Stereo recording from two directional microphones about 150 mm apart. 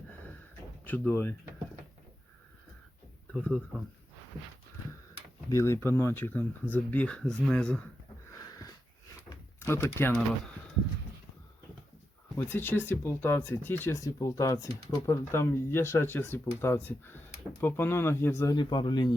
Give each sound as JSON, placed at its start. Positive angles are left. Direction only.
{"t": 0.9, "sound": "speech", "side_deg": 10}
{"t": 3.3, "sound": "speech", "side_deg": 5}
{"t": 5.5, "sound": "speech", "side_deg": 20}
{"t": 8.3, "sound": "a sound", "side_deg": 20}
{"t": 12.5, "sound": "speech", "side_deg": 15}
{"t": 18.5, "sound": "speech", "side_deg": 30}